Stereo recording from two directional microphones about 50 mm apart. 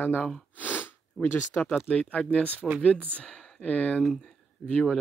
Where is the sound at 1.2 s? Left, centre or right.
Left.